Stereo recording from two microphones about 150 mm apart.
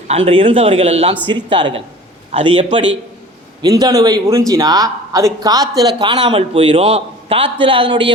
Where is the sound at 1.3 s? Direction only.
30° right (ahead or behind).